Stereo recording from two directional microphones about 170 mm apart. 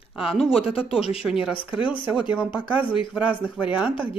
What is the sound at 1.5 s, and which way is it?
Speech, 30° left (ahead or behind).